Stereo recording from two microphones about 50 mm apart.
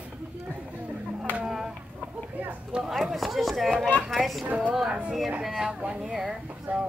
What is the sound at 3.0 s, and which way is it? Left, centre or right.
Speech, centre.